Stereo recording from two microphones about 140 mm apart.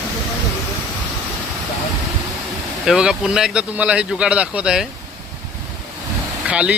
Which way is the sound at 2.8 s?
5° right (ahead or behind).